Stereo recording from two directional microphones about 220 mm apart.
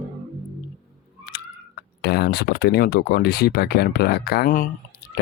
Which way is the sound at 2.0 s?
50° left (ahead or behind).